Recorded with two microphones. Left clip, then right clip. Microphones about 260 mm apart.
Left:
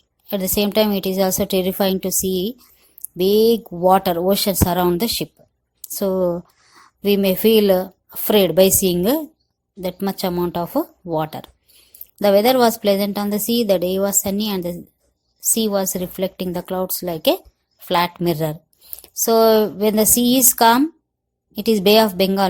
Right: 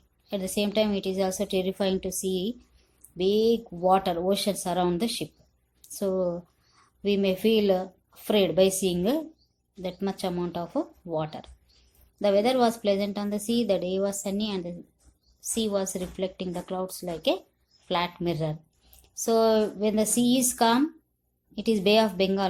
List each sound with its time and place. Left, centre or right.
0.3 s a woman's voice: left